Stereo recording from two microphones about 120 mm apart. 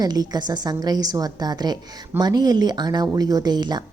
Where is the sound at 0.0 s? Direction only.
35° right (ahead or behind).